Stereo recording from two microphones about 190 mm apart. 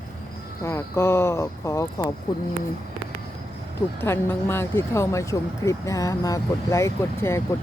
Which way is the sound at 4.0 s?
10° left (ahead or behind).